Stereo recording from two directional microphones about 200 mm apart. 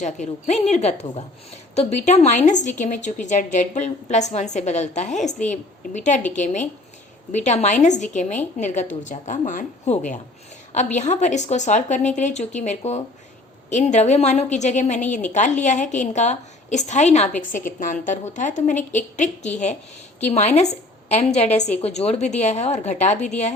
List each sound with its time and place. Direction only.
0.0 s a woman's voice: 35° left (ahead or behind)